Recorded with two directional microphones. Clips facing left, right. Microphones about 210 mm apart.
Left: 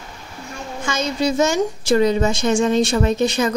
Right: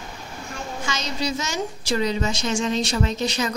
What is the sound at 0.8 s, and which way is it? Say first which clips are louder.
A woman's voice: left 8 dB; 55° left (ahead or behind).